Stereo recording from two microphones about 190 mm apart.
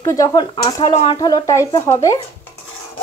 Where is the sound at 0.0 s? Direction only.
15° left (ahead or behind).